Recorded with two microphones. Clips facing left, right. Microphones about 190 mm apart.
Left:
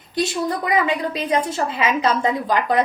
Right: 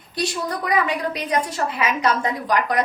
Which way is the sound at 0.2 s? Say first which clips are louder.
Left 3 dB; 25° left (ahead or behind).